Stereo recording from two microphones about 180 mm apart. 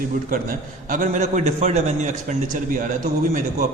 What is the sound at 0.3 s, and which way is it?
A man's voice, 50° right (ahead or behind).